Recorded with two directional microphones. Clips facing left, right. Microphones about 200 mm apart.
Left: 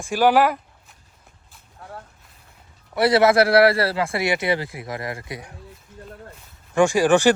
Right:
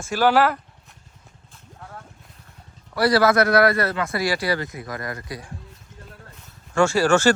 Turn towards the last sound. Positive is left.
turn(degrees=15)  # may be behind; listen again after turning